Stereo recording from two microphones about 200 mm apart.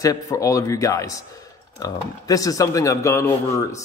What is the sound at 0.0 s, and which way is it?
Speech, 15° left (ahead or behind).